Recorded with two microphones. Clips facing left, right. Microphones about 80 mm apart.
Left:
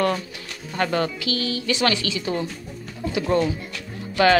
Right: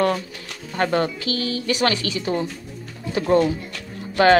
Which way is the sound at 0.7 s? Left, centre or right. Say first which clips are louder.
Right 2 dB; right.